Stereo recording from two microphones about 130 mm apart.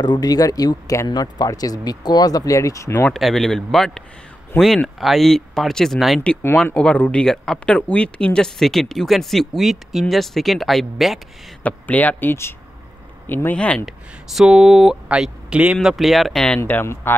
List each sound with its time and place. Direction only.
0.0 s speech: 30° left (ahead or behind)
3.1 s speech: centre (ahead or behind)
11.6 s speech: 10° left (ahead or behind)
13.8 s speech: 5° right (ahead or behind); by 17.1 s 20° left (ahead or behind)